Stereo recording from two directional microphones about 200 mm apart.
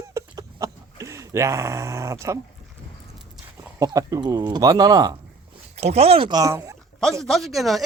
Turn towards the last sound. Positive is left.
turn(degrees=0)  # may be behind; listen again after turning